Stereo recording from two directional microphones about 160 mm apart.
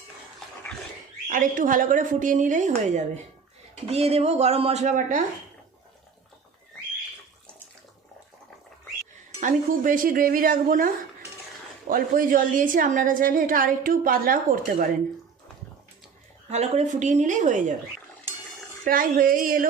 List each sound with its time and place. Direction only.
1.3 s speech: 55° right (ahead or behind)
9.4 s a woman's voice: 55° right (ahead or behind)
16.5 s speech: 45° right (ahead or behind)
18.9 s a woman's voice: 60° right (ahead or behind)